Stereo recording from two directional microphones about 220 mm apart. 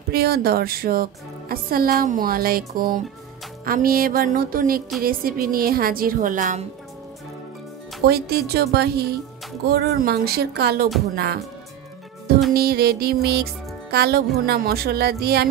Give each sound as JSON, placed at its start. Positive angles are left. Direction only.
{"t": 0.1, "sound": "a woman's voice", "side_deg": -45}
{"t": 8.1, "sound": "speech", "side_deg": -45}
{"t": 12.5, "sound": "speech", "side_deg": -45}